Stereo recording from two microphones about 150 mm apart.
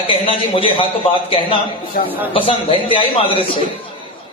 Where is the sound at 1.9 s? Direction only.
70° left (ahead or behind).